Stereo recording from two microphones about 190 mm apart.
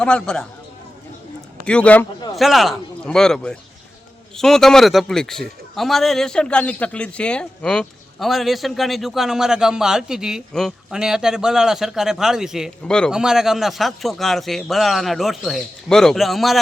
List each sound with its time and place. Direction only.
0.0 s a man's voice: 5° left (ahead or behind)
1.6 s a man's voice: 5° left (ahead or behind)